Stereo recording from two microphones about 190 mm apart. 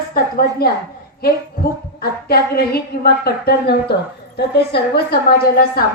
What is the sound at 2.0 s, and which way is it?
A woman's voice, 55° left (ahead or behind).